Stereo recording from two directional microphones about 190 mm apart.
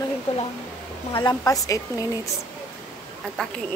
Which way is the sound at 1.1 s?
20° left (ahead or behind).